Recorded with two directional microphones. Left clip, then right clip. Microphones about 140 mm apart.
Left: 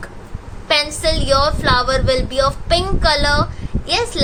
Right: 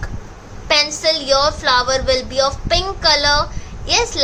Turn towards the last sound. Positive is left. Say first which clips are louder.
# right 2 dB
turn(degrees=5)  # may be behind; listen again after turning